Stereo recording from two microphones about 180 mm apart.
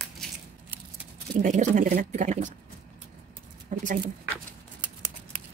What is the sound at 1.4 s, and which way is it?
Speech, 45° right (ahead or behind).